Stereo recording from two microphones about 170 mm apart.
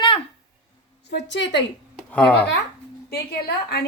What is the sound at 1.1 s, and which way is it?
Speech, 90° left.